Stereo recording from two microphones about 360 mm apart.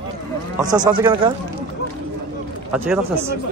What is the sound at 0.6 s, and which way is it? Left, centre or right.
Speech, centre.